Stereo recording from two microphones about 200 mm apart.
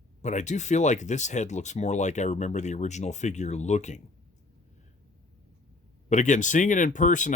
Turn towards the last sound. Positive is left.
turn(degrees=40)  # may be behind; listen again after turning